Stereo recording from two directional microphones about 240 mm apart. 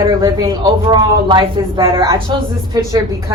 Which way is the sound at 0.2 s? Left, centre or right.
Centre.